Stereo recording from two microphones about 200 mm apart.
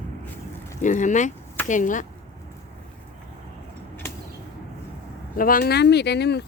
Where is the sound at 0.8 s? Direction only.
40° left (ahead or behind).